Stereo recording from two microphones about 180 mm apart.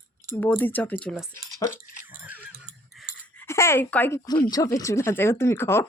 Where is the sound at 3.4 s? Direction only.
15° left (ahead or behind).